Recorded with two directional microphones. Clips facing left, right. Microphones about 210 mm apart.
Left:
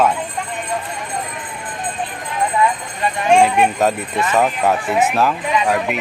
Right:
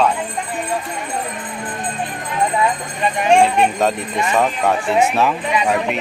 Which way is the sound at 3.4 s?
5° left (ahead or behind).